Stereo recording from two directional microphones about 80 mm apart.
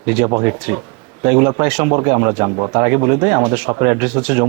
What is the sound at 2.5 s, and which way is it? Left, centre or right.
Speech, right.